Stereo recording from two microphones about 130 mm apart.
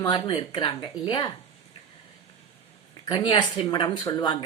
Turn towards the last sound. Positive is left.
turn(degrees=35)  # may be behind; listen again after turning